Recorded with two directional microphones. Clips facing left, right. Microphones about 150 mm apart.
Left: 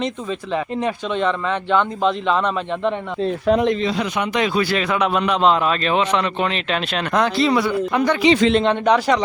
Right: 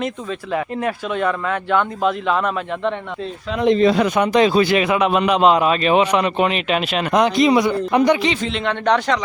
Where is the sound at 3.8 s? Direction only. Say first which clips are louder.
Right 6 dB; 55° right (ahead or behind); by 4.7 s 30° right (ahead or behind).